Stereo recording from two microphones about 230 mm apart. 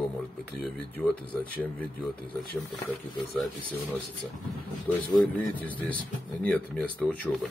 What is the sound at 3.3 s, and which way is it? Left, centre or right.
Speech, centre.